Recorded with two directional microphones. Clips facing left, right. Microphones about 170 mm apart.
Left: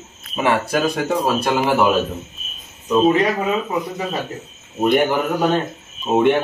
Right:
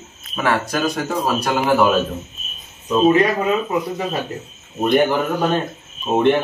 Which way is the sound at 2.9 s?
Centre (ahead or behind).